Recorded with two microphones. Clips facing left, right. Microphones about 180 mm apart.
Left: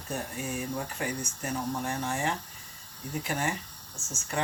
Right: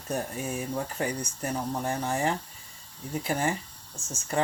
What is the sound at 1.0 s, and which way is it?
Speech, 40° right (ahead or behind).